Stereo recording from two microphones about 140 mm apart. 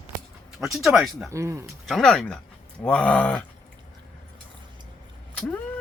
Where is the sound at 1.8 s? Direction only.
Centre (ahead or behind).